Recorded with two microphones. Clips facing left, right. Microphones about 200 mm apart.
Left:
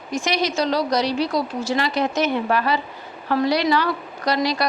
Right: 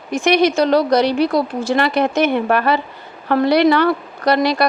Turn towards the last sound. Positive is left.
turn(degrees=-60)  # may be behind; listen again after turning